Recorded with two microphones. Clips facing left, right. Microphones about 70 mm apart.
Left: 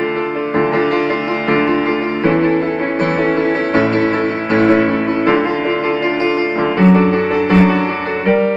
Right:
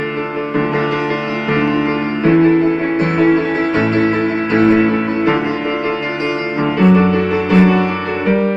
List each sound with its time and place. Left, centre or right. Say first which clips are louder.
2.2 s music: right 4 dB; left
6.8 s music: even; left